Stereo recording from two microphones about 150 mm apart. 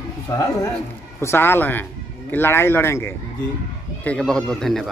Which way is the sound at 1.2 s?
15° left (ahead or behind).